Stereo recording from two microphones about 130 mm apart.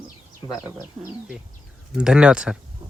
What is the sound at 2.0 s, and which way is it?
Owl, 5° right (ahead or behind).